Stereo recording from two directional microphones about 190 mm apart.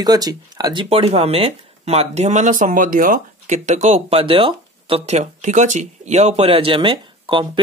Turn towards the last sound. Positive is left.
turn(degrees=-25)  # may be behind; listen again after turning